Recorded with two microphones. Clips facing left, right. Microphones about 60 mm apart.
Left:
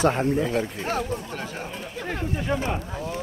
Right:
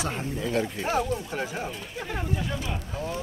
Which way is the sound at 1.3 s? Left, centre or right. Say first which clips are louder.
Right 2 dB; centre.